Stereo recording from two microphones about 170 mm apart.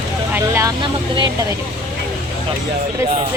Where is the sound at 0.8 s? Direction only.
25° right (ahead or behind).